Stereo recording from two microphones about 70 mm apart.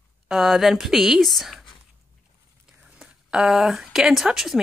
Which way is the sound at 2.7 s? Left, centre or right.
Centre.